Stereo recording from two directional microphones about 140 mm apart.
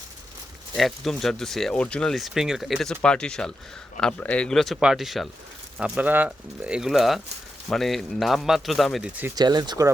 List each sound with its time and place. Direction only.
0.8 s speech: centre (ahead or behind)
9.3 s speech: 30° right (ahead or behind)